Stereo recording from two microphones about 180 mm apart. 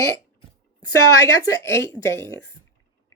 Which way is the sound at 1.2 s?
15° left (ahead or behind).